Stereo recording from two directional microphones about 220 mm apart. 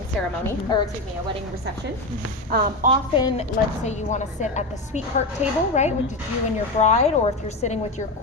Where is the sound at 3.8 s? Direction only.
30° left (ahead or behind).